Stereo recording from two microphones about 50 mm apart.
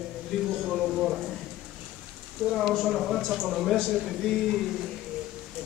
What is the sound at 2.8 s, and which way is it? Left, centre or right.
Speech, centre.